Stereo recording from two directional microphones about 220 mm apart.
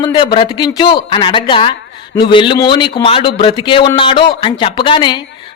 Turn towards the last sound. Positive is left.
turn(degrees=20)  # may be behind; listen again after turning